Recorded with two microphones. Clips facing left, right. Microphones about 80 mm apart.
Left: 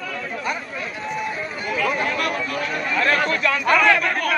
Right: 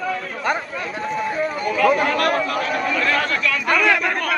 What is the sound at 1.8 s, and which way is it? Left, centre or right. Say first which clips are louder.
Chatter: right 6 dB; right.